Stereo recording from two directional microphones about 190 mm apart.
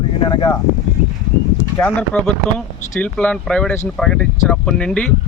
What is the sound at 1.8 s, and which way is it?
Speech, 5° left (ahead or behind).